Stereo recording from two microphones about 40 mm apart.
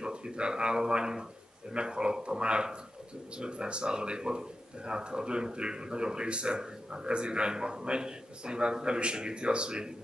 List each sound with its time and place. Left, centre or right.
0.0 s speech: right